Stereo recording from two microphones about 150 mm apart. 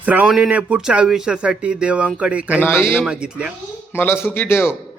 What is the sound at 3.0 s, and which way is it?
Speech, 5° right (ahead or behind).